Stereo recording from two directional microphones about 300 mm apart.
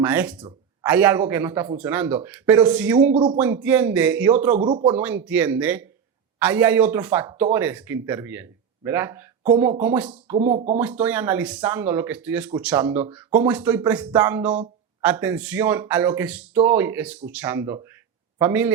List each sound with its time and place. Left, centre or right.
0.0 s speech: centre
0.3 s a sound: centre
0.9 s speech: centre
4.5 s speech: right
4.9 s speech: centre
10.3 s speech: right
10.8 s speech: centre